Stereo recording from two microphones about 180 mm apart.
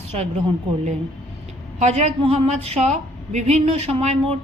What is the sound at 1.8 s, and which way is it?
A woman's voice, 40° right (ahead or behind).